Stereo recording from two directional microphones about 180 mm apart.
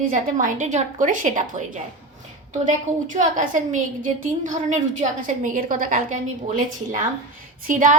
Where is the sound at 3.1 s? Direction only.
45° right (ahead or behind).